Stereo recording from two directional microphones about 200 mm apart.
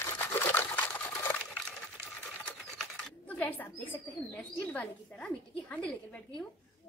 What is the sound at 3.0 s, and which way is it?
Speech, 10° left (ahead or behind).